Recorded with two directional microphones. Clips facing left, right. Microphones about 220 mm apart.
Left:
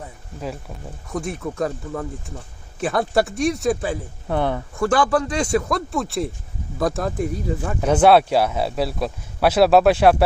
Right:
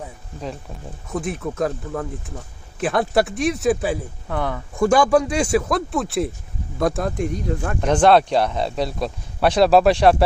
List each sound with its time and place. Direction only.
1.1 s speech: centre (ahead or behind)
4.3 s speech: 30° left (ahead or behind)
4.8 s speech: 15° right (ahead or behind); by 10.2 s 5° left (ahead or behind)